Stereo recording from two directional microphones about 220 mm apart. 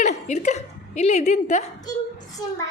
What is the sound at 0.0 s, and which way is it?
A woman's voice, 30° left (ahead or behind).